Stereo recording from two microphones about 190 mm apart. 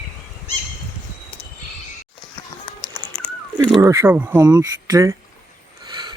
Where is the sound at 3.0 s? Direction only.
10° left (ahead or behind).